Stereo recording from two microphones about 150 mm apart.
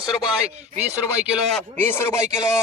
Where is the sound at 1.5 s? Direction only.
15° left (ahead or behind).